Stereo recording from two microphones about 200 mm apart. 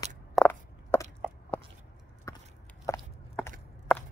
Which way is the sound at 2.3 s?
15° left (ahead or behind).